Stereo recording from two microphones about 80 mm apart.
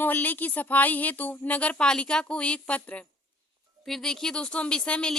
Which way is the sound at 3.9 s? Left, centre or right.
Centre.